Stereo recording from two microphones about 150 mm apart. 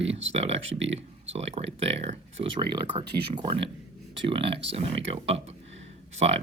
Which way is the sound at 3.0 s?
90° right.